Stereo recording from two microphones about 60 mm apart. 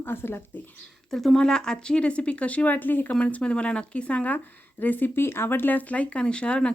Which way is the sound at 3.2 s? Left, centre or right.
Centre.